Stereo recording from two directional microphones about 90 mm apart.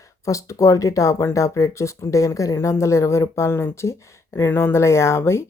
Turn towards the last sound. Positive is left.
turn(degrees=30)  # may be behind; listen again after turning